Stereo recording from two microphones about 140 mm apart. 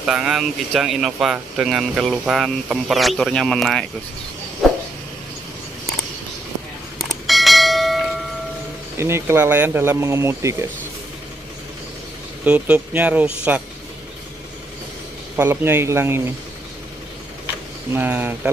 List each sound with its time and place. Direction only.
0.0 s speech: 5° right (ahead or behind)
4.6 s a sound: centre (ahead or behind)
7.0 s bell: centre (ahead or behind)
8.9 s speech: 20° right (ahead or behind)
12.4 s speech: 10° right (ahead or behind)
15.3 s speech: 15° right (ahead or behind)
17.9 s speech: 15° right (ahead or behind)